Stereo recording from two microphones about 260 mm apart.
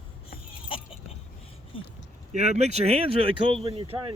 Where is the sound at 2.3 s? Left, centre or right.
Right.